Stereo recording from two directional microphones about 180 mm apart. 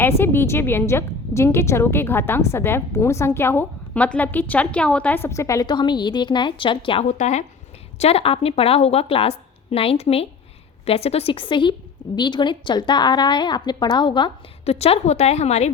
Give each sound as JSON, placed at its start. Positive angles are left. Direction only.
{"t": 0.0, "sound": "a woman's voice", "side_deg": 10}
{"t": 7.1, "sound": "a woman's voice", "side_deg": 40}